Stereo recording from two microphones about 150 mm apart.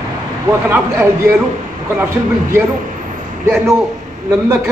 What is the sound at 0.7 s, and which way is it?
Speech, 10° right (ahead or behind).